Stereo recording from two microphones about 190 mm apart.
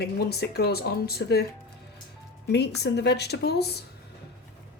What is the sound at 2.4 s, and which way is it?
A woman's voice, 60° left (ahead or behind).